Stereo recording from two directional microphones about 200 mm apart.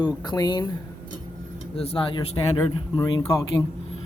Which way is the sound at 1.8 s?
30° left (ahead or behind).